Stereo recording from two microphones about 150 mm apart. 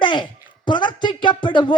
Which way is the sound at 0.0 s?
30° left (ahead or behind).